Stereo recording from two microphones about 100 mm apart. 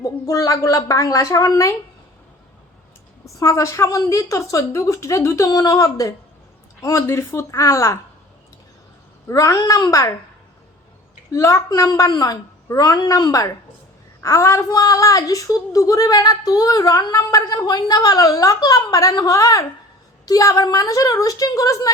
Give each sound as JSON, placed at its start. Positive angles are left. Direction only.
{"t": 0.0, "sound": "a woman's voice", "side_deg": 35}
{"t": 3.2, "sound": "a woman's voice", "side_deg": 30}
{"t": 9.2, "sound": "a woman's voice", "side_deg": 35}
{"t": 11.3, "sound": "a woman's voice", "side_deg": 30}